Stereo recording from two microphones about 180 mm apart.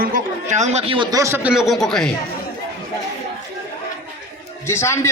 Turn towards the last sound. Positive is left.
turn(degrees=15)  # may be behind; listen again after turning